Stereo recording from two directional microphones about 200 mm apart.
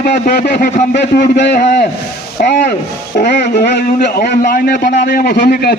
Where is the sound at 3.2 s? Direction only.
55° left (ahead or behind).